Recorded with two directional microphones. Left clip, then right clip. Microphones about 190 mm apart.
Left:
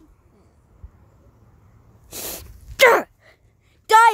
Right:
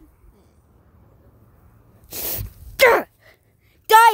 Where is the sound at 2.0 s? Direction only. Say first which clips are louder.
Right 1 dB; 10° right (ahead or behind).